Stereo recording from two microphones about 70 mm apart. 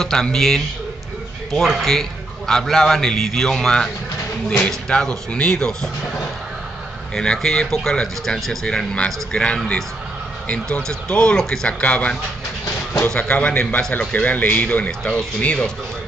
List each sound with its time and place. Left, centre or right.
0.0 s a man's voice: centre
7.2 s a man's voice: centre
14.9 s speech: centre